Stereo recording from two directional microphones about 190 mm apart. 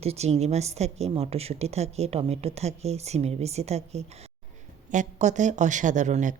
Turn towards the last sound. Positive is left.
turn(degrees=-40)  # may be behind; listen again after turning